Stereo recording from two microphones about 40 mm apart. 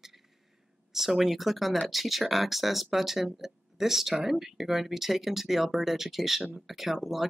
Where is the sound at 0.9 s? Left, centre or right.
Centre.